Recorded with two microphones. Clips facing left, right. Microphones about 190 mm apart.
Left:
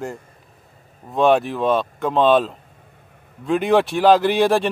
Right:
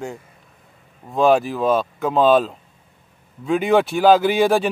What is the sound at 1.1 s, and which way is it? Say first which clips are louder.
Speech: even; centre (ahead or behind).